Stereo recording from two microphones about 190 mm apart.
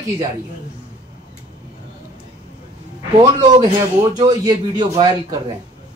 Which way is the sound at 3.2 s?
20° right (ahead or behind).